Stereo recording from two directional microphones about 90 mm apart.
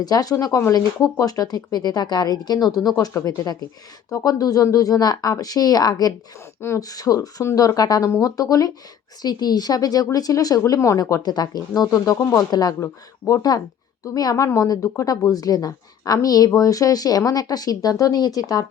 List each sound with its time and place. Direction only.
0.0 s speech: 45° left (ahead or behind)
12.8 s speech: 35° left (ahead or behind)